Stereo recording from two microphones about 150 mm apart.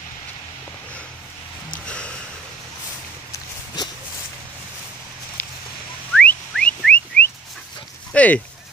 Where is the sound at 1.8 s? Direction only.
5° left (ahead or behind).